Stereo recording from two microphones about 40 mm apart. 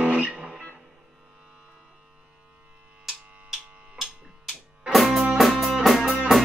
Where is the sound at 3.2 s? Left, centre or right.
Right.